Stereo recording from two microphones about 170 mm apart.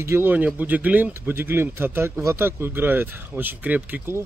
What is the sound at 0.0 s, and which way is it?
Speech, 15° right (ahead or behind).